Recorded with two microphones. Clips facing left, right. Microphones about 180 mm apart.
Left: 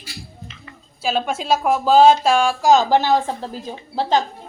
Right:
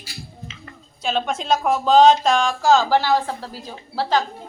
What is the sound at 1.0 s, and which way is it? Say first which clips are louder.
Speech: left 1 dB; 5° left (ahead or behind).